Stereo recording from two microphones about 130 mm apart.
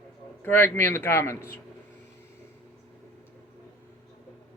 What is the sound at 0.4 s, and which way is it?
Speech, 15° left (ahead or behind).